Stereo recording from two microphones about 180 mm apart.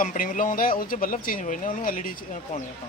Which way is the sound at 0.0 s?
45° left (ahead or behind).